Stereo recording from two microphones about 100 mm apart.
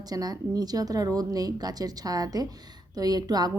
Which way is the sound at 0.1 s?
40° right (ahead or behind).